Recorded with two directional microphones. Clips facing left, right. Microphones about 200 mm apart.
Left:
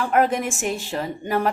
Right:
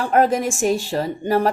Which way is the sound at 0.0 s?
35° right (ahead or behind).